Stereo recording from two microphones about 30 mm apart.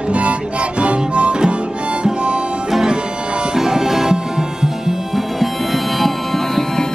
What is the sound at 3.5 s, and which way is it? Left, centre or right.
Music, centre.